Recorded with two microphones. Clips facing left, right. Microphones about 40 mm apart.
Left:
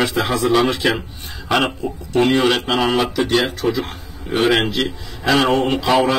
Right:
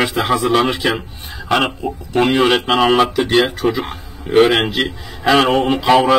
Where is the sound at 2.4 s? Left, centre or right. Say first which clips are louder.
Right 3 dB; right.